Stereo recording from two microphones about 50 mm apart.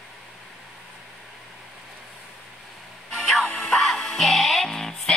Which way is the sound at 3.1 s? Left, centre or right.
Centre.